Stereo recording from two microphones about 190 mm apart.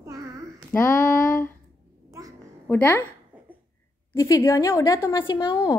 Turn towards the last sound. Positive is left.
turn(degrees=20)  # may be behind; listen again after turning